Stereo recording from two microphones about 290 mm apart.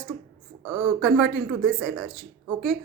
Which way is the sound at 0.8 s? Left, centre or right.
Centre.